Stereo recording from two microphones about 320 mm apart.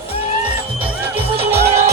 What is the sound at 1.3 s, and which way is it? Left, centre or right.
Music, centre.